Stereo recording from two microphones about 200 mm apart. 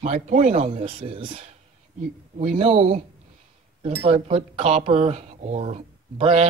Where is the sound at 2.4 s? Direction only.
35° right (ahead or behind).